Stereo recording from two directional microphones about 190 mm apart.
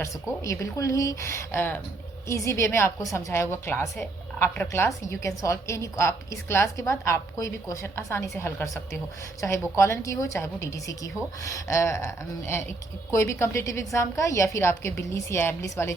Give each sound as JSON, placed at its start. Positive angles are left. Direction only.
{"t": 0.4, "sound": "a woman's voice", "side_deg": 15}